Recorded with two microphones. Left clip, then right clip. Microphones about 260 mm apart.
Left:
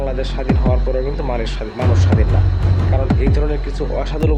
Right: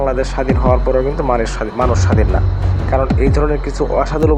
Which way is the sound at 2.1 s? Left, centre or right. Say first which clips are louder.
Right 4 dB; centre.